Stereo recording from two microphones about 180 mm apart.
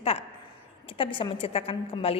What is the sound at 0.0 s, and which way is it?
A woman's voice, 35° left (ahead or behind).